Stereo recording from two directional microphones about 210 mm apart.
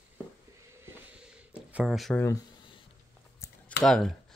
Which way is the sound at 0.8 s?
5° right (ahead or behind).